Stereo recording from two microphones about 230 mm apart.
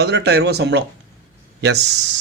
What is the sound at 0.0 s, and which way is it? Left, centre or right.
Speech, right.